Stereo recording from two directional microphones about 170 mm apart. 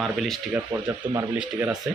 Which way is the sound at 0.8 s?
25° right (ahead or behind).